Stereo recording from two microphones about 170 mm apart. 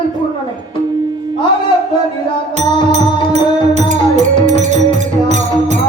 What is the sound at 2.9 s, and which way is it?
Music, 40° right (ahead or behind).